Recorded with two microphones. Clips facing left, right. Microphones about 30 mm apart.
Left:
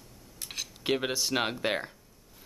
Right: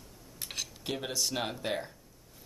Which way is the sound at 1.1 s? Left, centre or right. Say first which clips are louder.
Left 3 dB; left.